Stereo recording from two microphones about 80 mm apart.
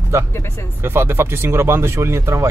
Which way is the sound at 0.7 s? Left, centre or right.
Right.